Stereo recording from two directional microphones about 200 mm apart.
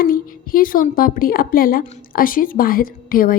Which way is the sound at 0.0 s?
45° left (ahead or behind).